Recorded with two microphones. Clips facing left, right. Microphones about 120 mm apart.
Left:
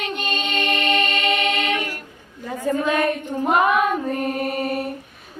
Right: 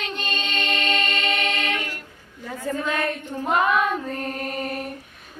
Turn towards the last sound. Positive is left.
turn(degrees=10)  # may be behind; listen again after turning